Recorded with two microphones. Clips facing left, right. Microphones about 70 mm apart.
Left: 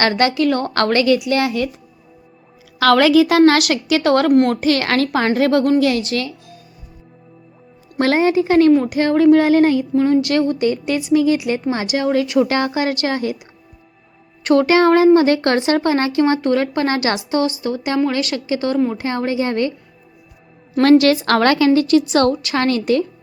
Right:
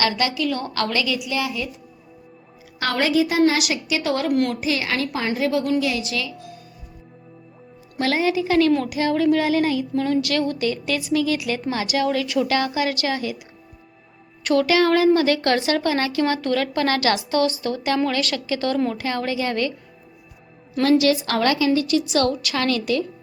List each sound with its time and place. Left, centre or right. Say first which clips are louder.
0.0 s a woman's voice: left 6 dB; left
2.9 s a woman's voice: left 8 dB; left
4.3 s a woman's voice: left 6 dB; left
4.6 s a woman's voice: left 7 dB; left
7.9 s a woman's voice: left 6 dB; left
9.9 s a woman's voice: left 6 dB; left
14.4 s a woman's voice: left 5 dB; left
20.9 s a woman's voice: left 6 dB; left